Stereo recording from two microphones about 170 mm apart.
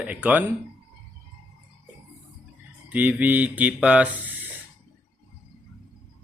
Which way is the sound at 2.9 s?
10° right (ahead or behind).